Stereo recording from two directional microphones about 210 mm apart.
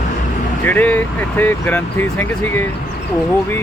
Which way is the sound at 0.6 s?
10° left (ahead or behind).